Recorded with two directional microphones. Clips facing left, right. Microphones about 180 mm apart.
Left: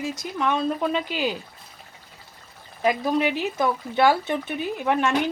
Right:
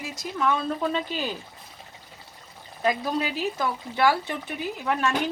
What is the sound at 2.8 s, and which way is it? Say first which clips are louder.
Speech: left 4 dB; 20° left (ahead or behind).